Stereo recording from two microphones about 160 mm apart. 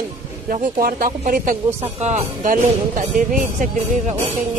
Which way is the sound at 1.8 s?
45° right (ahead or behind).